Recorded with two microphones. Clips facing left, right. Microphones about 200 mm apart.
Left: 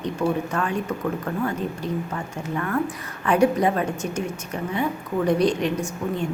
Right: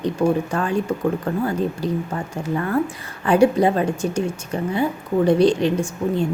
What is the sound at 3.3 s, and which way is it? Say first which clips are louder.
A woman's voice: right 4 dB; 30° right (ahead or behind).